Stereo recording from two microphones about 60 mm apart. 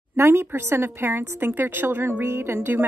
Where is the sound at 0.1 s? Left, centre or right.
Right.